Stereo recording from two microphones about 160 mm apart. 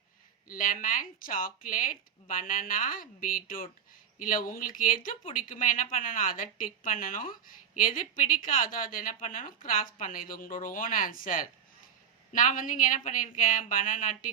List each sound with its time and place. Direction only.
0.4 s a woman's voice: 55° left (ahead or behind)